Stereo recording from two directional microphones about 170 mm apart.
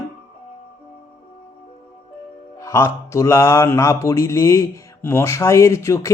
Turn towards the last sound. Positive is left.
turn(degrees=15)  # may be behind; listen again after turning